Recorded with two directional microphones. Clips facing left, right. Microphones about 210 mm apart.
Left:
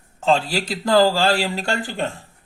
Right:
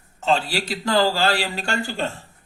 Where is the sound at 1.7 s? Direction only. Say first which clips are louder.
Left 1 dB; 15° left (ahead or behind).